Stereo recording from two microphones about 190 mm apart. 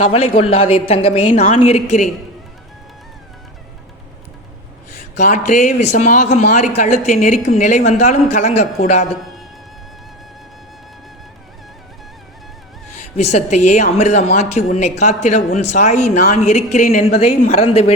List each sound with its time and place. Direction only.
0.0 s speech: 30° left (ahead or behind)
4.9 s speech: 40° left (ahead or behind)
12.9 s speech: 35° left (ahead or behind)